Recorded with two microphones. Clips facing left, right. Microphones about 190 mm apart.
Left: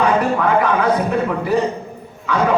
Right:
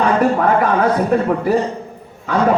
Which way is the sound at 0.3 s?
45° right (ahead or behind).